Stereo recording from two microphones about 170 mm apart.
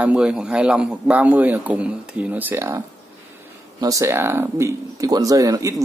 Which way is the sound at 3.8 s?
20° right (ahead or behind).